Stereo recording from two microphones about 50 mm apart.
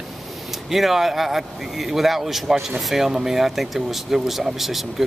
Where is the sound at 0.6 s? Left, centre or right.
Centre.